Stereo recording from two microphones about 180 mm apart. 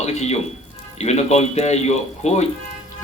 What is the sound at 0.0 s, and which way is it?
Speech, 40° left (ahead or behind).